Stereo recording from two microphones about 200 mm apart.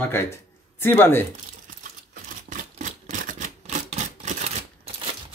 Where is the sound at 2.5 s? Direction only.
40° right (ahead or behind).